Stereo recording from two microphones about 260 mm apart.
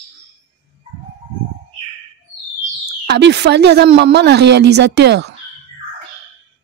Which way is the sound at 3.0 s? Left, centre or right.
Right.